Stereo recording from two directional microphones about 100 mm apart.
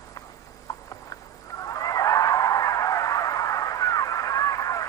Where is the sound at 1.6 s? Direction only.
35° left (ahead or behind).